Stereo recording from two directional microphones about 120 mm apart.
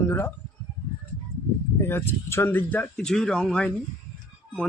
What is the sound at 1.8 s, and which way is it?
Speech, 20° left (ahead or behind).